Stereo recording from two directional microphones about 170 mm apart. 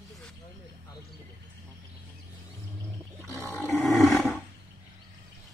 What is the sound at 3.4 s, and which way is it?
Roar, 10° left (ahead or behind).